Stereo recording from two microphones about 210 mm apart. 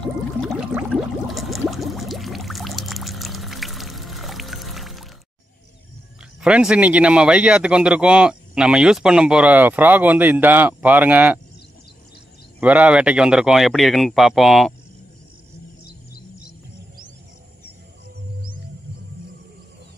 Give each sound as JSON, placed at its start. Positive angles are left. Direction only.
{"t": 0.0, "sound": "a sound", "side_deg": 0}
{"t": 6.4, "sound": "a man's voice", "side_deg": -5}
{"t": 12.5, "sound": "a man's voice", "side_deg": -5}